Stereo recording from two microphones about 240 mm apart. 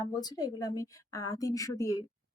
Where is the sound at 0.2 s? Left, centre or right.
Centre.